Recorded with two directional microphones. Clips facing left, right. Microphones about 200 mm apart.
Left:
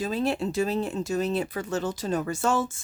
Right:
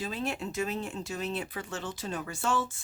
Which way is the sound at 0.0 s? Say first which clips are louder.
Left 7 dB; 40° left (ahead or behind).